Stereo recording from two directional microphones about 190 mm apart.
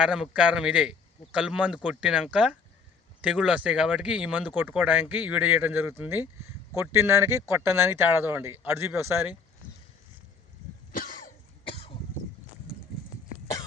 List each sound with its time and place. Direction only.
0.0 s speech: 5° right (ahead or behind)
10.9 s cough: 45° left (ahead or behind)